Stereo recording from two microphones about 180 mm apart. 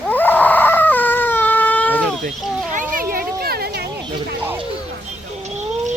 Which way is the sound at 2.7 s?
50° right (ahead or behind).